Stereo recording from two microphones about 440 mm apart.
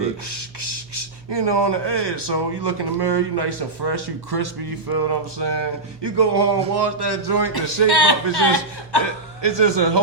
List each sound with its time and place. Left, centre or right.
0.3 s speech: right
7.9 s a man's voice: left
9.4 s speech: right